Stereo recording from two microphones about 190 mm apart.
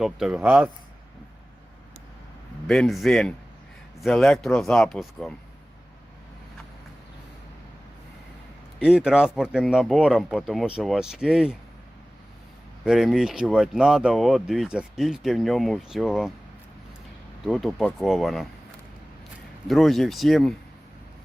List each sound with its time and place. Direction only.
0.0 s speech: 5° right (ahead or behind)
2.6 s speech: centre (ahead or behind)
8.8 s speech: 5° right (ahead or behind)
12.8 s speech: centre (ahead or behind)
17.4 s speech: centre (ahead or behind)
19.6 s speech: centre (ahead or behind)